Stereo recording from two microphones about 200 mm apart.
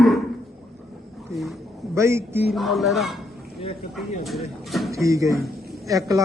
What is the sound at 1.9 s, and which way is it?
Speech, 15° right (ahead or behind).